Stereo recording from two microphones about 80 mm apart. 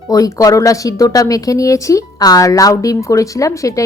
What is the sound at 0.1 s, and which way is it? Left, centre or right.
A woman's voice, left.